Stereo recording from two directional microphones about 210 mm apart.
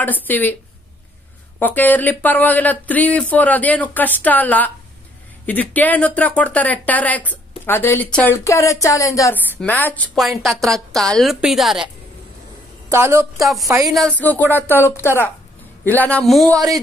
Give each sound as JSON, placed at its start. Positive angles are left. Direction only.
{"t": 0.0, "sound": "speech", "side_deg": 10}
{"t": 1.6, "sound": "speech", "side_deg": 10}
{"t": 12.9, "sound": "a woman's voice", "side_deg": -10}
{"t": 13.8, "sound": "a man's voice", "side_deg": 5}
{"t": 16.5, "sound": "a woman's voice", "side_deg": -15}